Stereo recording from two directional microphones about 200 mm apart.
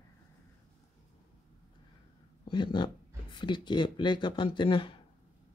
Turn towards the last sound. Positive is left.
turn(degrees=25)  # may be behind; listen again after turning